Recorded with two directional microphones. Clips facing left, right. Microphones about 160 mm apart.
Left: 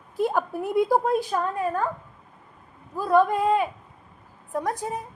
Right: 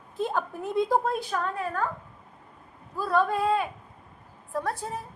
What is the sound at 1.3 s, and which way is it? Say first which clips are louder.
Speech: left 4 dB; 20° left (ahead or behind).